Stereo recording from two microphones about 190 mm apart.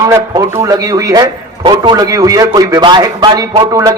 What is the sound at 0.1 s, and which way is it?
A man's voice, 15° right (ahead or behind).